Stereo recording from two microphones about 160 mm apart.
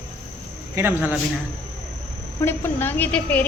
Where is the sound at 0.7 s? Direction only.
10° right (ahead or behind).